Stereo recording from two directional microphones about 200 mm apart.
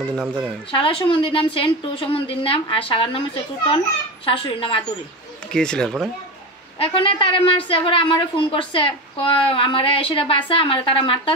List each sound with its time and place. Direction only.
0.0 s speech: 10° right (ahead or behind)
0.7 s a woman's voice: 25° left (ahead or behind)
5.5 s speech: 5° left (ahead or behind)
6.8 s a woman's voice: 25° left (ahead or behind)